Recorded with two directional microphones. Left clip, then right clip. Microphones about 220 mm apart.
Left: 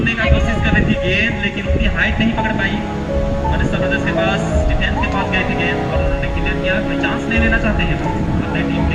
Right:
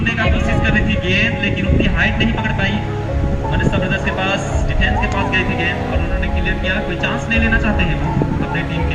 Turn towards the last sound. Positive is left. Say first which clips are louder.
# even
turn(degrees=-50)  # may be behind; listen again after turning